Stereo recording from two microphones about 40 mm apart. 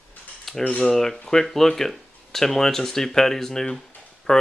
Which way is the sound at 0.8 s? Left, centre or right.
Centre.